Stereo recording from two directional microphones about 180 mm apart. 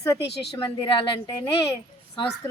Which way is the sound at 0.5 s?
25° left (ahead or behind).